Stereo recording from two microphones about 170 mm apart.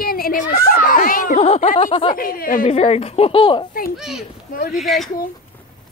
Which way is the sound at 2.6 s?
35° left (ahead or behind).